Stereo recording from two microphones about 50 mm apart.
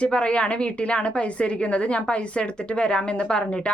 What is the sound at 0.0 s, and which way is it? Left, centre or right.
A woman's voice, centre.